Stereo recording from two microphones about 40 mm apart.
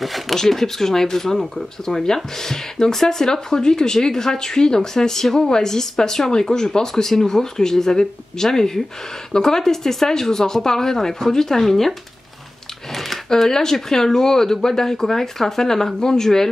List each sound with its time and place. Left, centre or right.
0.0 s a sound: centre
0.4 s speech: centre
13.3 s speech: centre